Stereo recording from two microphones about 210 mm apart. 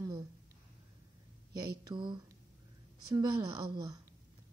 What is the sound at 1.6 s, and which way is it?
Speech, 20° right (ahead or behind).